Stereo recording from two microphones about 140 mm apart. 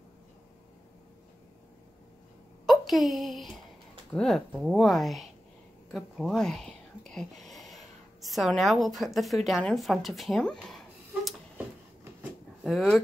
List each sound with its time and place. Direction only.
2.6 s a woman's voice: centre (ahead or behind)
12.6 s speech: centre (ahead or behind)